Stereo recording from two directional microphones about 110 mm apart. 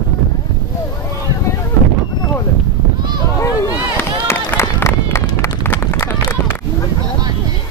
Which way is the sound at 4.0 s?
20° left (ahead or behind).